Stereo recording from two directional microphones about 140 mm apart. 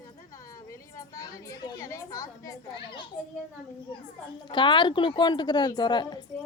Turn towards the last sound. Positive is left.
turn(degrees=30)  # may be behind; listen again after turning